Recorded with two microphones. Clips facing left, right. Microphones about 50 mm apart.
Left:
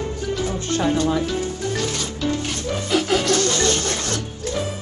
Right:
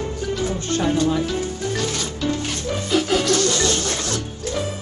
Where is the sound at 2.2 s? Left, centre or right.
Centre.